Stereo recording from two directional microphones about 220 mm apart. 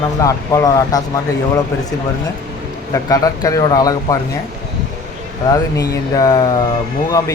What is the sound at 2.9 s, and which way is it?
Speech, 15° left (ahead or behind).